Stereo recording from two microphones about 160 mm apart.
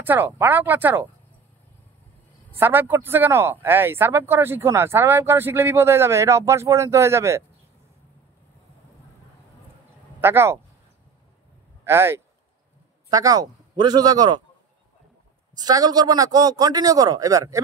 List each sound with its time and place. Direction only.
0.0 s speech: 10° right (ahead or behind)
2.5 s speech: 15° right (ahead or behind)
10.2 s speech: 15° right (ahead or behind)
11.8 s a man's voice: 15° right (ahead or behind)
15.5 s a man's voice: 25° right (ahead or behind)